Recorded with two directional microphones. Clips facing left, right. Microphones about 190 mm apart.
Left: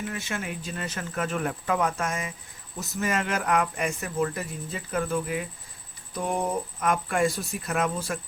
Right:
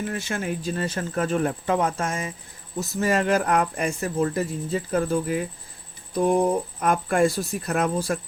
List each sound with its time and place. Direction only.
0.1 s speech: 40° right (ahead or behind)